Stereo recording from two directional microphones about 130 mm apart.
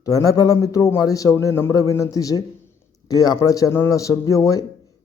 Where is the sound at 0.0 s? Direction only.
25° left (ahead or behind).